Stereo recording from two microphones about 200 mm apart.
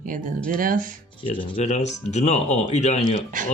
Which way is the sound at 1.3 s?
25° left (ahead or behind).